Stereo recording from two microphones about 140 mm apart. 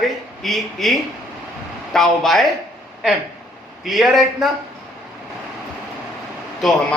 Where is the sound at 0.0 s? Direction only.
Centre (ahead or behind).